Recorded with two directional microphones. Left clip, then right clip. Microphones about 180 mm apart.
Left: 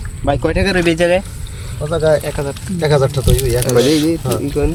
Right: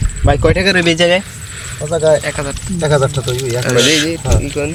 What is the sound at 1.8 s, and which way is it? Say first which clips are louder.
Speech: right 2 dB; centre (ahead or behind).